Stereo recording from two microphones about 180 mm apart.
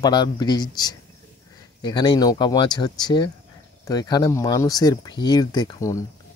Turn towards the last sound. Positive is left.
turn(degrees=20)  # may be behind; listen again after turning